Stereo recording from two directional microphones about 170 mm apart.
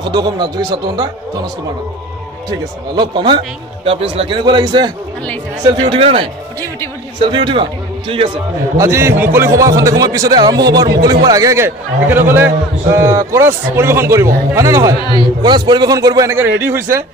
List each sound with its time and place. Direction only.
0.0 s a man's voice: 25° right (ahead or behind)
3.0 s a man's voice: 25° right (ahead or behind)
8.7 s a man's voice: 15° right (ahead or behind)